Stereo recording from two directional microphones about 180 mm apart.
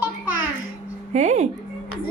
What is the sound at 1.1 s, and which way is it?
Speech, 40° right (ahead or behind).